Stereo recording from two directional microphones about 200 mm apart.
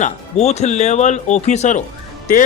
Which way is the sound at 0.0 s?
35° left (ahead or behind).